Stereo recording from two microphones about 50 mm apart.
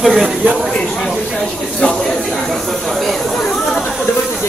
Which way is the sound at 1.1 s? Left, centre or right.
Centre.